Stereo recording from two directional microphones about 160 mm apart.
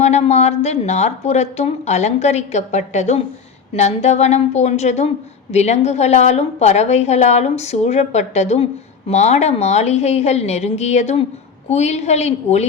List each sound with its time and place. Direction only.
0.0 s speech: 45° left (ahead or behind)